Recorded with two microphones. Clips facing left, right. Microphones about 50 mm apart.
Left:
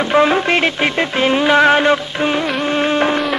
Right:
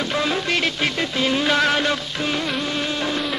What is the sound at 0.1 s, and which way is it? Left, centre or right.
Speech, left.